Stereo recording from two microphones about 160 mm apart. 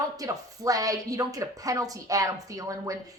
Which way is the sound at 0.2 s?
20° right (ahead or behind).